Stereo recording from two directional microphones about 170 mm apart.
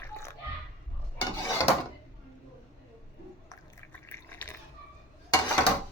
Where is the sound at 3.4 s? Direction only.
15° left (ahead or behind).